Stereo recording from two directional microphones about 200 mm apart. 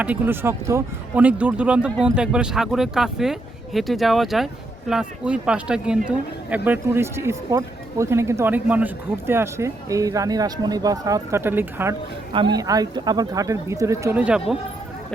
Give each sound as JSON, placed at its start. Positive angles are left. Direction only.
{"t": 0.0, "sound": "speech", "side_deg": -10}
{"t": 12.3, "sound": "speech", "side_deg": -25}